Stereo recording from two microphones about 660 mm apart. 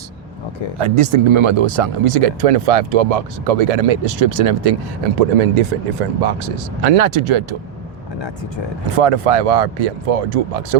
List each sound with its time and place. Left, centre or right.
0.8 s speech: right
5.4 s speech: right
9.0 s speech: right